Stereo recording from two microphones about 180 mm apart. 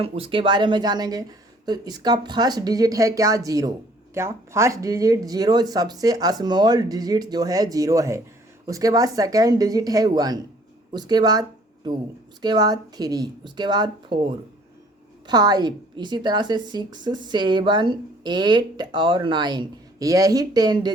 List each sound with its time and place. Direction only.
0.0 s a woman's voice: 30° right (ahead or behind)